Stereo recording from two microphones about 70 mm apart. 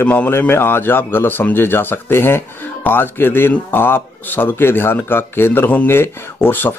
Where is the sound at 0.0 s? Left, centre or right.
Left.